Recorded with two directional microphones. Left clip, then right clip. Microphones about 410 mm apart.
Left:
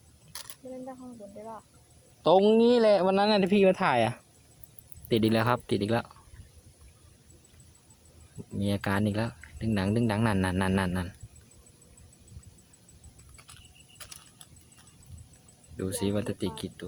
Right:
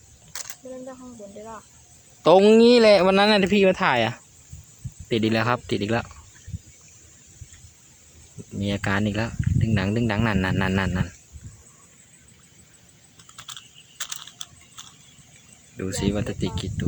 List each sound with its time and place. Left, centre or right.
2.2 s speech: left
8.5 s speech: left
14.0 s a sound: left
15.8 s speech: left